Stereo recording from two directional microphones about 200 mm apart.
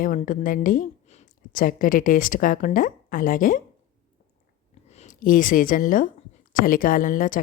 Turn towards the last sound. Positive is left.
turn(degrees=40)  # may be behind; listen again after turning